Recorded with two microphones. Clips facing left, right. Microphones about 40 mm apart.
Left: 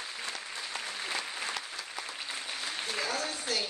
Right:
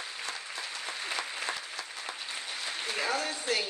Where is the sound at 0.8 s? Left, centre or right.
Centre.